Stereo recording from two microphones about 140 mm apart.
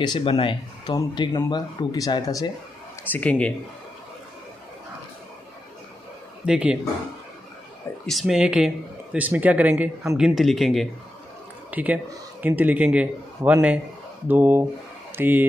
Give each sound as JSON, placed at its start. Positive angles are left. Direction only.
{"t": 0.0, "sound": "speech", "side_deg": 35}
{"t": 3.1, "sound": "speech", "side_deg": 10}
{"t": 6.4, "sound": "speech", "side_deg": -5}
{"t": 8.1, "sound": "speech", "side_deg": 0}
{"t": 11.7, "sound": "speech", "side_deg": -10}